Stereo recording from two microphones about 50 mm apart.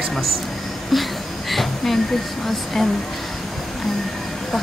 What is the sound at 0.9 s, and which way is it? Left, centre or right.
Speech, centre.